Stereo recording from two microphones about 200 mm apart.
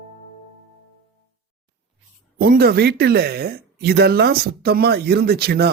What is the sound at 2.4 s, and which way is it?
Speech, 50° right (ahead or behind).